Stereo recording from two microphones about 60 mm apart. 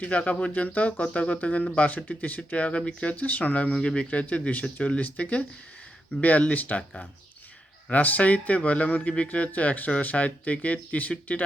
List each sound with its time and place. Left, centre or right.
0.0 s speech: left